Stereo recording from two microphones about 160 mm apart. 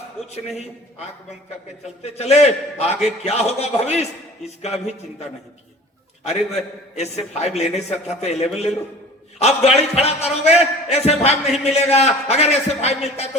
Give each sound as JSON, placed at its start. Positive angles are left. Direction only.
{"t": 2.0, "sound": "a man's voice", "side_deg": 40}
{"t": 6.2, "sound": "a man's voice", "side_deg": 45}